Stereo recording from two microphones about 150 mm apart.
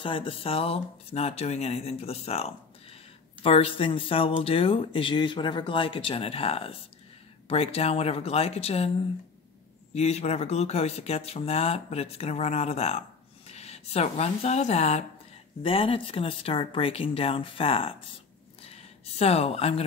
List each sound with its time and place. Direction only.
0.0 s speech: 35° left (ahead or behind)
9.9 s speech: 45° left (ahead or behind)
18.6 s a sound: 45° left (ahead or behind)